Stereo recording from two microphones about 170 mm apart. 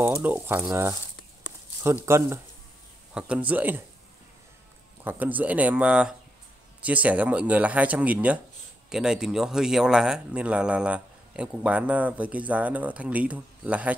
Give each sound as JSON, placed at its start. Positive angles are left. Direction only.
{"t": 0.0, "sound": "speech", "side_deg": -10}
{"t": 2.0, "sound": "speech", "side_deg": -15}
{"t": 5.0, "sound": "speech", "side_deg": -10}